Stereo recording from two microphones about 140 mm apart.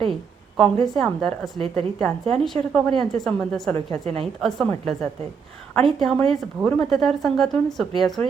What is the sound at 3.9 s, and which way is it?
Speech, 45° right (ahead or behind).